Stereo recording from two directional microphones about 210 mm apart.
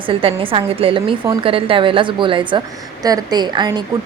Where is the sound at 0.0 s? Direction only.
25° right (ahead or behind).